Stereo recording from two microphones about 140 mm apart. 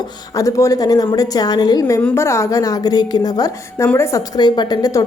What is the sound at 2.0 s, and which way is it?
A woman's voice, 15° left (ahead or behind).